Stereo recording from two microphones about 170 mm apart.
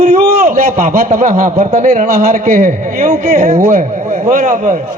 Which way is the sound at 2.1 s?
60° right (ahead or behind).